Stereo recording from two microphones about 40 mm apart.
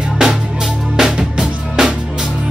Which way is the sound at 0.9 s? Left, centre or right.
Centre.